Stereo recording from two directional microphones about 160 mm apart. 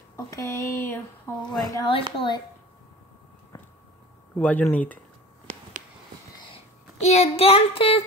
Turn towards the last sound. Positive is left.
turn(degrees=35)  # may be behind; listen again after turning